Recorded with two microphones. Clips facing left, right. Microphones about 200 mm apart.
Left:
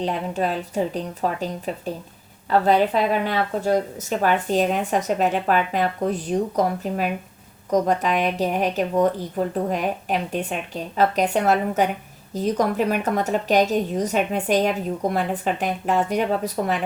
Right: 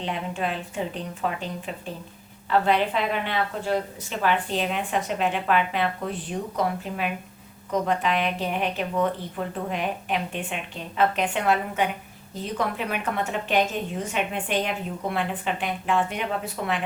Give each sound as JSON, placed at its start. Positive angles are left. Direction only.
{"t": 0.0, "sound": "speech", "side_deg": 40}